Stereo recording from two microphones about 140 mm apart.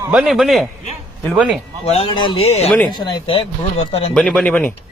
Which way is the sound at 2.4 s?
50° left (ahead or behind).